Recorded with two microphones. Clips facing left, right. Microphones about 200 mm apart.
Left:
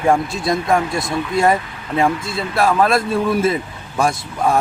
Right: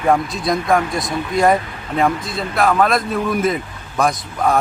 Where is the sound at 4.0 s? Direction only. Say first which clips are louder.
Even; 30° left (ahead or behind).